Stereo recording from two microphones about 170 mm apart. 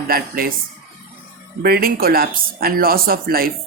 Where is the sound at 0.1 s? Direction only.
60° right (ahead or behind).